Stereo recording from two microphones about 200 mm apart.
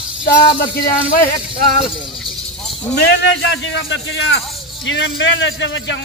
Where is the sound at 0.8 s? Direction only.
50° left (ahead or behind).